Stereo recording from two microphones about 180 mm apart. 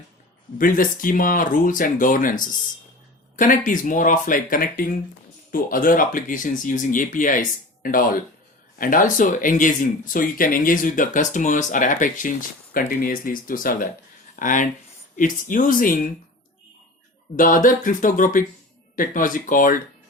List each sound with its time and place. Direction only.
0.6 s speech: 50° left (ahead or behind)
17.3 s speech: 50° left (ahead or behind)